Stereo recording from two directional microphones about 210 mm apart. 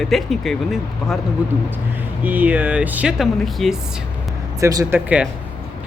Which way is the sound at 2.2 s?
10° right (ahead or behind).